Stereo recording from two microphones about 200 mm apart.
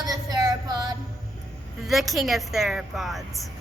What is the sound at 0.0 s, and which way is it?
Child singing, 20° right (ahead or behind).